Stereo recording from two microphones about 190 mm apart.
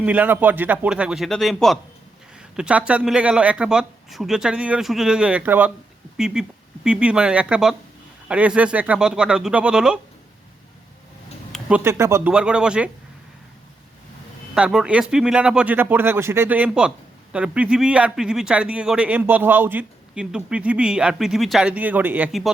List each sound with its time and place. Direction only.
0.0 s a man's voice: 10° right (ahead or behind)
11.8 s a man's voice: 15° right (ahead or behind)
14.5 s speech: 5° right (ahead or behind)